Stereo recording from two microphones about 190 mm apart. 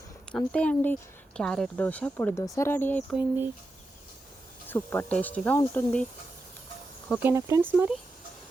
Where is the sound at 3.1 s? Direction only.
10° right (ahead or behind).